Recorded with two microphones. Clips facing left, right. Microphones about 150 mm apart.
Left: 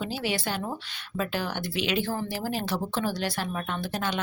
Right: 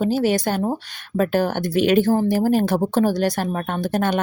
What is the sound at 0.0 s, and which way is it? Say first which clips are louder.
Speech: right 11 dB; 45° right (ahead or behind).